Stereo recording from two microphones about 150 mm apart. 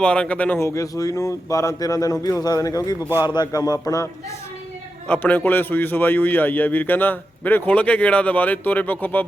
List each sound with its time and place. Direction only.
0.0 s speech: 5° left (ahead or behind); by 4.1 s 25° left (ahead or behind)
5.0 s a man's voice: 10° left (ahead or behind)